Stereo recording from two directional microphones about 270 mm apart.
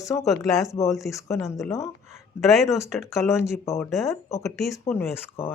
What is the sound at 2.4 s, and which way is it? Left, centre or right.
Speech, centre.